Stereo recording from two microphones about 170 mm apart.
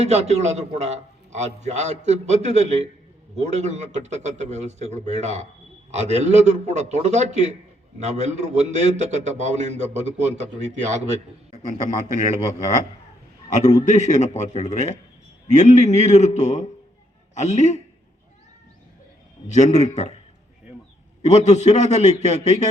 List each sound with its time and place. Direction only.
0.0 s a man's voice: 40° right (ahead or behind)
13.7 s a man's voice: 45° left (ahead or behind)
19.5 s a man's voice: 45° left (ahead or behind)
21.2 s a man's voice: 40° left (ahead or behind)